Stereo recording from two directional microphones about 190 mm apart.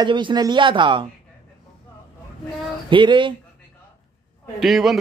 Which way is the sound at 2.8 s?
25° right (ahead or behind).